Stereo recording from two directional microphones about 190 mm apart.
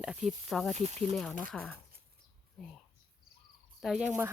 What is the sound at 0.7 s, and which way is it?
Speech, 35° right (ahead or behind).